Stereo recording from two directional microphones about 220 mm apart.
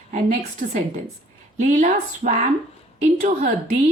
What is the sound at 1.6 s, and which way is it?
Speech, 35° right (ahead or behind).